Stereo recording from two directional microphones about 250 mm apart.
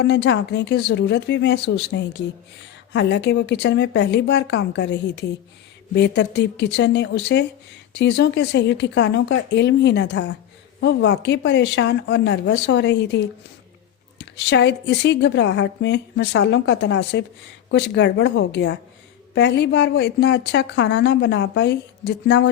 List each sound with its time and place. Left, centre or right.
0.0 s a woman's voice: left